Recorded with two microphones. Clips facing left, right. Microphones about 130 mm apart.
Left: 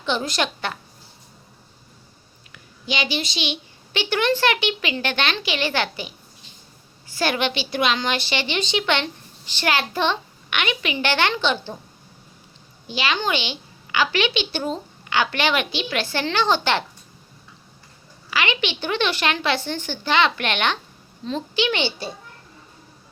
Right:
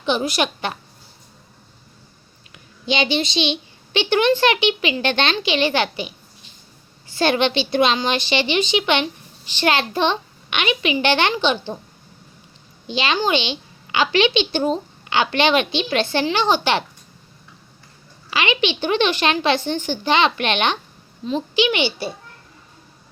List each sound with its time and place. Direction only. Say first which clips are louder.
0.0 s a child's voice: right 3 dB; 15° right (ahead or behind)
2.5 s a woman's voice: right 5 dB; 25° right (ahead or behind)
7.2 s a woman's voice: right 5 dB; 25° right (ahead or behind)
12.9 s a woman's voice: right 4 dB; 25° right (ahead or behind)
18.3 s a woman's voice: right 3 dB; 20° right (ahead or behind)